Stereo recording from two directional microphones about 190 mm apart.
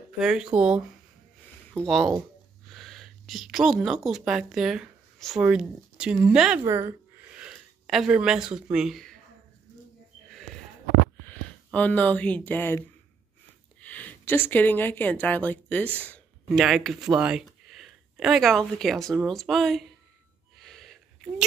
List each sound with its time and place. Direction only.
0.2 s speech: 5° right (ahead or behind)
11.2 s a woman's voice: 10° left (ahead or behind)
20.5 s a sound: centre (ahead or behind)